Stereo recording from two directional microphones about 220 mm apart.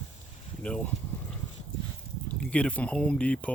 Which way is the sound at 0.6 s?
5° left (ahead or behind).